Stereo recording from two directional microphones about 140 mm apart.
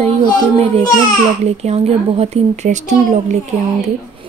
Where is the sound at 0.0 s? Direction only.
45° right (ahead or behind).